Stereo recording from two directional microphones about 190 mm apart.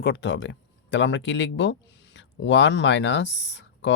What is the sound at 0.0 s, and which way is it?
Speech, 60° left (ahead or behind).